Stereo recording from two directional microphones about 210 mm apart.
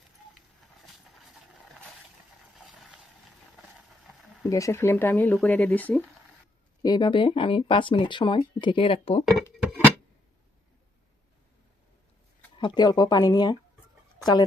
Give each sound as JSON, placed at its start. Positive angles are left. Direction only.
{"t": 0.3, "sound": "a sound", "side_deg": 0}
{"t": 2.6, "sound": "a sound", "side_deg": 0}
{"t": 4.4, "sound": "speech", "side_deg": 15}
{"t": 6.8, "sound": "speech", "side_deg": 20}
{"t": 9.2, "sound": "music", "side_deg": -5}
{"t": 12.5, "sound": "speech", "side_deg": 20}